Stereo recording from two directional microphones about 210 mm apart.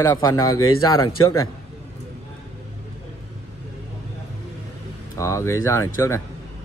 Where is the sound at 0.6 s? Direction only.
85° left.